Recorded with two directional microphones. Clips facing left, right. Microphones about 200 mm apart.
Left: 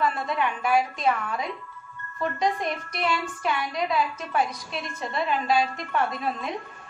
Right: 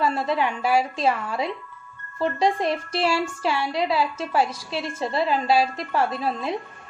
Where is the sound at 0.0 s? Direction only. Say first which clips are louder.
Right 3 dB; 30° right (ahead or behind).